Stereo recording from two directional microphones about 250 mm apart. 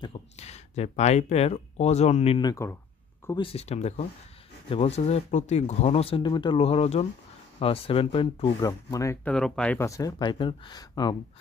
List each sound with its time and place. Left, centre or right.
0.0 s speech: left